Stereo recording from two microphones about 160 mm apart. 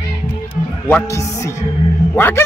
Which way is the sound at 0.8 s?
15° left (ahead or behind).